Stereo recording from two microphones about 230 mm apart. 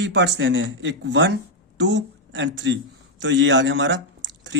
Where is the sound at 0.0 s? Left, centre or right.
Right.